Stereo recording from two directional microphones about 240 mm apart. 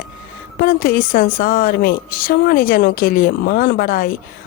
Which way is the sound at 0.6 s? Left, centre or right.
Left.